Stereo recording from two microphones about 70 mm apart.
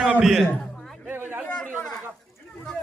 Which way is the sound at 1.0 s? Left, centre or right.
Right.